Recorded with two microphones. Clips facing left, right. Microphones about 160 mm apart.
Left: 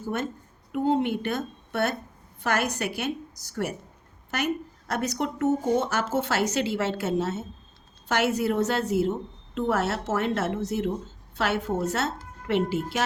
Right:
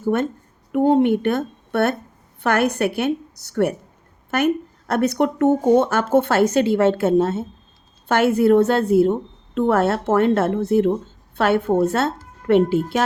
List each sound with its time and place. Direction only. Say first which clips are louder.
0.0 s speech: right 9 dB; 60° right (ahead or behind)